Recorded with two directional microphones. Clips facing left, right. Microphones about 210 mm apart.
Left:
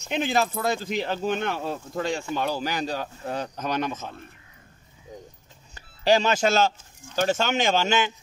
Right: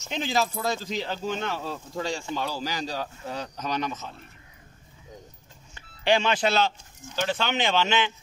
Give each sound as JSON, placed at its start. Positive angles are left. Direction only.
{"t": 0.1, "sound": "speech", "side_deg": 55}
{"t": 5.8, "sound": "speech", "side_deg": 40}